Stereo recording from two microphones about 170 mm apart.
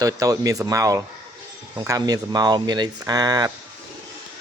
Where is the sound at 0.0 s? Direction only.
20° right (ahead or behind).